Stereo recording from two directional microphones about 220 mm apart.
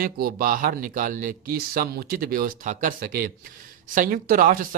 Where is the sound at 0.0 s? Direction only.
40° right (ahead or behind).